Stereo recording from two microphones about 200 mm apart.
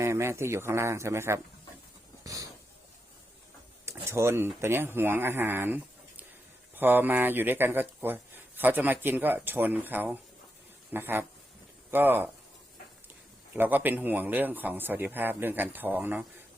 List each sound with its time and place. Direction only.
0.0 s a man's voice: 15° right (ahead or behind)
2.2 s a sound: 15° right (ahead or behind)
3.8 s a man's voice: 15° right (ahead or behind)
13.5 s a man's voice: 10° right (ahead or behind)